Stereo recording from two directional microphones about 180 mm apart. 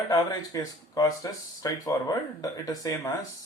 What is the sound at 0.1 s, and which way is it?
Speech, 20° left (ahead or behind).